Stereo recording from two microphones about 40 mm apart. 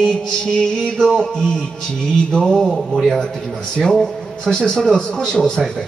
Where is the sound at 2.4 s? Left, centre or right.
Centre.